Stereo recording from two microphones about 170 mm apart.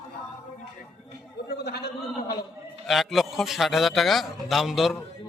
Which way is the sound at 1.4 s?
70° left (ahead or behind).